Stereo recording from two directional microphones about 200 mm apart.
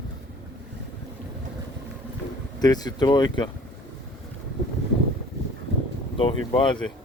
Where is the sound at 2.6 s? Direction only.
20° left (ahead or behind).